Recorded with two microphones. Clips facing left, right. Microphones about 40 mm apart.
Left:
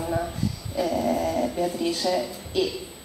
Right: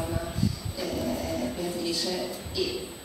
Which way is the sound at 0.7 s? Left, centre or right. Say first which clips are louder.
Left 9 dB; left.